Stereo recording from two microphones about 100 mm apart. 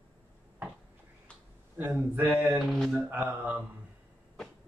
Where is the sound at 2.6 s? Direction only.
Centre (ahead or behind).